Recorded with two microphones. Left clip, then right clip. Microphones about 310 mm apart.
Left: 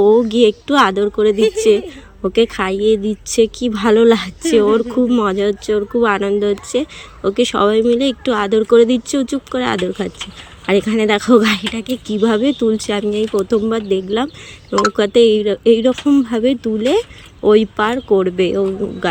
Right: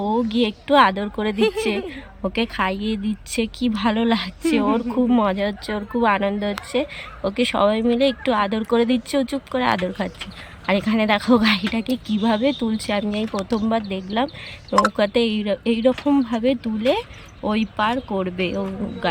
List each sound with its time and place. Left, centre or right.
0.0 s speech: centre